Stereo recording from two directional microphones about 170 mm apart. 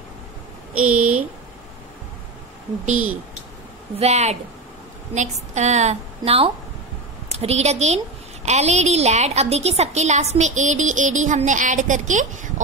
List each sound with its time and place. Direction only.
0.7 s speech: 10° right (ahead or behind)
4.0 s a woman's voice: 40° right (ahead or behind)